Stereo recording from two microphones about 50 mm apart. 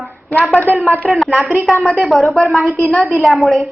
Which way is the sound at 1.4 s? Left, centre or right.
Right.